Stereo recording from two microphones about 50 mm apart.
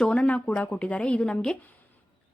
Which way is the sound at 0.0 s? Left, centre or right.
Centre.